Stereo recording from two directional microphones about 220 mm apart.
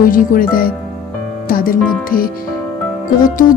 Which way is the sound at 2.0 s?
40° left (ahead or behind).